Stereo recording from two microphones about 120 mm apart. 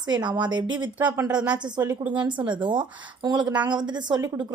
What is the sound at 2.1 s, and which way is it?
Speech, 40° right (ahead or behind).